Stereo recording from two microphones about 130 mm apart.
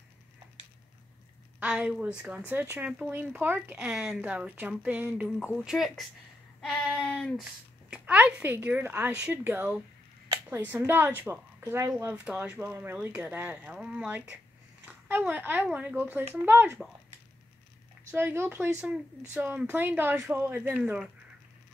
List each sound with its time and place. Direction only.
1.6 s a woman's voice: 10° right (ahead or behind)
6.6 s a sound: 10° left (ahead or behind)
7.9 s a woman's voice: 10° right (ahead or behind)
18.1 s a woman's voice: 15° right (ahead or behind)